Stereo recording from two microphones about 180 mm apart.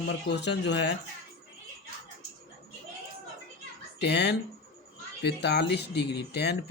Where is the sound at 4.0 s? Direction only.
70° left (ahead or behind).